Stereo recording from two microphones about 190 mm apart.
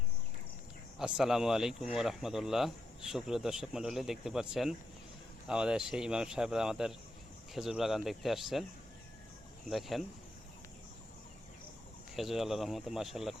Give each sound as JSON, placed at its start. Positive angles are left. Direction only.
{"t": 0.9, "sound": "speech", "side_deg": -5}
{"t": 9.6, "sound": "speech", "side_deg": 0}
{"t": 12.1, "sound": "speech", "side_deg": 0}